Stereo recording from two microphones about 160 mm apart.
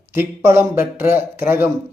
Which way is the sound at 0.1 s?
15° right (ahead or behind).